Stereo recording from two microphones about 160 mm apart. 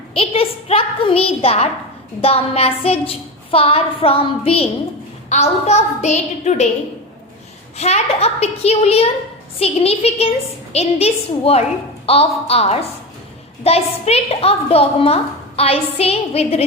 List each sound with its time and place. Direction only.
0.1 s a woman's voice: 35° left (ahead or behind)
7.8 s a woman's voice: 45° left (ahead or behind)